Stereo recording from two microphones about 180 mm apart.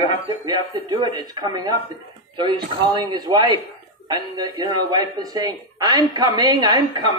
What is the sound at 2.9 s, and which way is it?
Speech, 25° right (ahead or behind).